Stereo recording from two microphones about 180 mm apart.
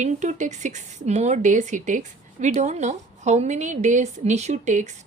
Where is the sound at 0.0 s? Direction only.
40° right (ahead or behind).